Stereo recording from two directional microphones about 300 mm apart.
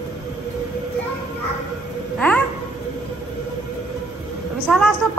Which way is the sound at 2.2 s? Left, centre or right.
Centre.